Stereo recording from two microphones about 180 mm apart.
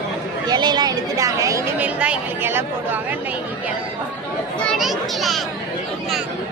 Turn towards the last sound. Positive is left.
turn(degrees=0)  # may be behind; listen again after turning